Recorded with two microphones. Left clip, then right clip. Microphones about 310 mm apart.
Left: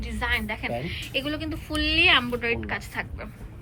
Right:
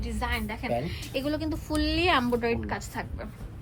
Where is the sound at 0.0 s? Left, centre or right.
Centre.